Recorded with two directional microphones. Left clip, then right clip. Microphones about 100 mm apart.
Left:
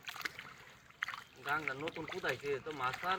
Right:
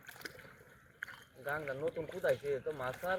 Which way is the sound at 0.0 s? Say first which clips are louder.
Left 6 dB; 15° right (ahead or behind).